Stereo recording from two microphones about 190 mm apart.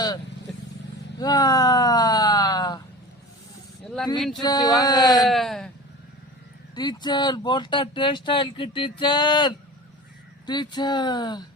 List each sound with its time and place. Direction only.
1.2 s speech: 20° left (ahead or behind)
4.4 s speech: 20° left (ahead or behind)
5.2 s speech: centre (ahead or behind)
6.7 s speech: 20° left (ahead or behind)